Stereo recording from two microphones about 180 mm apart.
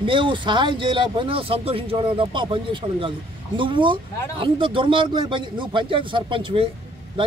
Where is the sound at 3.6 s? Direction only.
25° right (ahead or behind).